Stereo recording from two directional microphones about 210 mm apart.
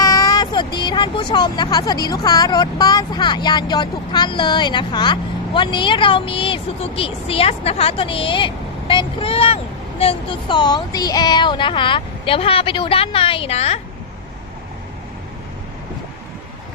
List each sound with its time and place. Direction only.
0.0 s speech: 15° left (ahead or behind)